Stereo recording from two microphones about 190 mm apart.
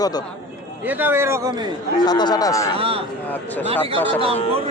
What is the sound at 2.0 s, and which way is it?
Speech, 20° left (ahead or behind).